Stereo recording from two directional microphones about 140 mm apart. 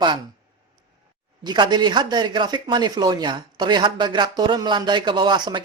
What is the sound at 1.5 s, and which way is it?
Speech, 30° right (ahead or behind).